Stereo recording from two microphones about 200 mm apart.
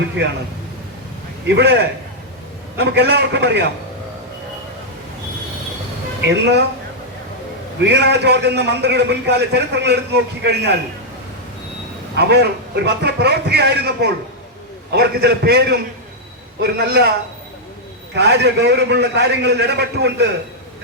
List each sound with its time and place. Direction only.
0.2 s a man's voice: 60° right (ahead or behind)
1.5 s a man's voice: 60° right (ahead or behind)
6.2 s a man's voice: 60° right (ahead or behind)
7.9 s a man's voice: 55° right (ahead or behind)
12.1 s a man's voice: 55° right (ahead or behind)
18.1 s a man's voice: 55° right (ahead or behind)